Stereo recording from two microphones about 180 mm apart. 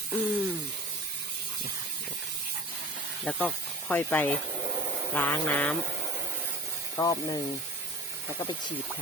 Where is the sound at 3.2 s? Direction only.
5° left (ahead or behind).